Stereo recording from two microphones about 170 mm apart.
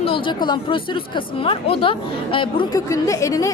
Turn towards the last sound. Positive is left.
turn(degrees=20)  # may be behind; listen again after turning